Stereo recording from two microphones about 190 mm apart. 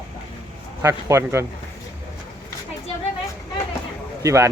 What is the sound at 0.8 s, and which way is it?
Speech, 15° right (ahead or behind).